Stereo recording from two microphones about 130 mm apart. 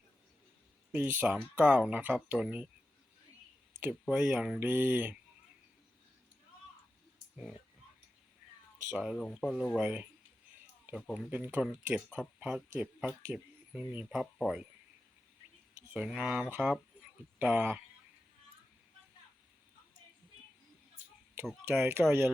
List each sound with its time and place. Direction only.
0.9 s speech: 15° right (ahead or behind)
4.0 s speech: 10° right (ahead or behind)
7.3 s speech: 5° right (ahead or behind)
9.0 s speech: 5° right (ahead or behind)
15.9 s speech: 10° right (ahead or behind)
21.6 s speech: 20° right (ahead or behind)